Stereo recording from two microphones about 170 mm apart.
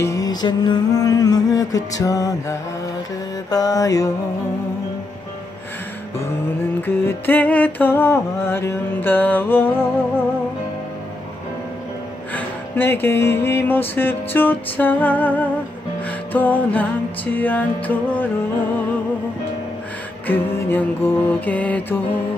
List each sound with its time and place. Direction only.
0.0 s music: 20° left (ahead or behind)
7.1 s music: 10° left (ahead or behind)
12.4 s music: 10° left (ahead or behind)
20.2 s music: 10° left (ahead or behind)